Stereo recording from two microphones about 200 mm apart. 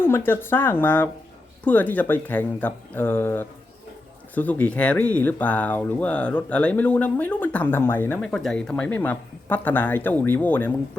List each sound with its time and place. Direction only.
0.0 s speech: 10° left (ahead or behind)